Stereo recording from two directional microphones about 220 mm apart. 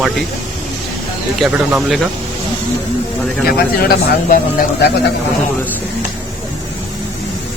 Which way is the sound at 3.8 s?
40° left (ahead or behind).